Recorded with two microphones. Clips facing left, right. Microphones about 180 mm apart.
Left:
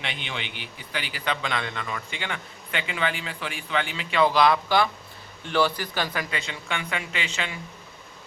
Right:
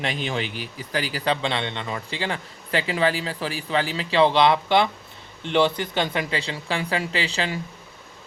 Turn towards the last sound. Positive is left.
turn(degrees=-35)  # may be behind; listen again after turning